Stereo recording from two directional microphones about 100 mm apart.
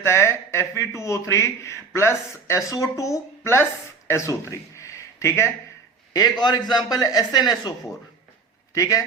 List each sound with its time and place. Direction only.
0.0 s speech: 25° left (ahead or behind)
6.1 s a man's voice: 45° left (ahead or behind)